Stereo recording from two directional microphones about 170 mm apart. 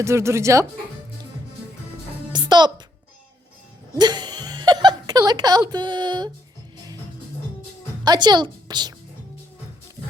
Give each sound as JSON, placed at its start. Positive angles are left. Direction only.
{"t": 0.0, "sound": "speech", "side_deg": -15}
{"t": 2.3, "sound": "music", "side_deg": -25}
{"t": 3.9, "sound": "speech", "side_deg": -25}
{"t": 8.0, "sound": "a woman's voice", "side_deg": -25}